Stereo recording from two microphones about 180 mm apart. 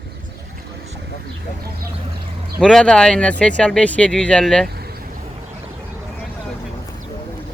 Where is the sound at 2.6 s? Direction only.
5° left (ahead or behind).